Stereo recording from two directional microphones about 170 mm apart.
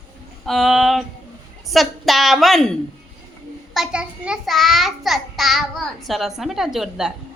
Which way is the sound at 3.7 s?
5° right (ahead or behind).